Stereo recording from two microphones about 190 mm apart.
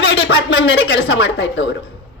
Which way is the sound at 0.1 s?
70° left (ahead or behind).